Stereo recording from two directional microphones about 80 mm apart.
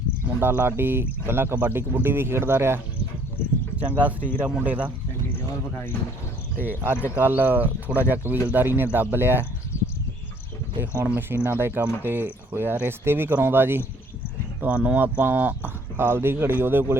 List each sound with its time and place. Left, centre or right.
0.3 s speech: right
3.8 s speech: centre
6.6 s speech: right
9.7 s a sound: left
10.8 s speech: right